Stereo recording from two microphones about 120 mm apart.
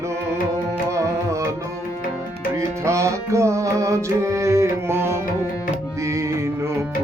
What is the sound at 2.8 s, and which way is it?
Music, 25° right (ahead or behind).